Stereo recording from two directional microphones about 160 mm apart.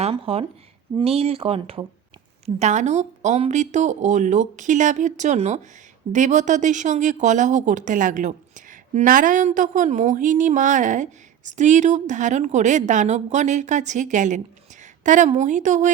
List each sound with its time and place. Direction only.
0.0 s speech: 35° right (ahead or behind)
2.6 s speech: 45° right (ahead or behind)